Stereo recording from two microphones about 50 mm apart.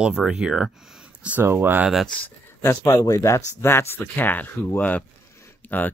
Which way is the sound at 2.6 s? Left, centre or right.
Left.